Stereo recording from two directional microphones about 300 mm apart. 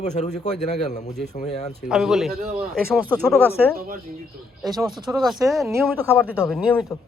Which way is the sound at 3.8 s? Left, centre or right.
Right.